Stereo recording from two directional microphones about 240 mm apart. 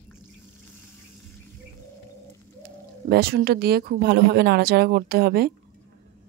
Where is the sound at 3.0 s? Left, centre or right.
Right.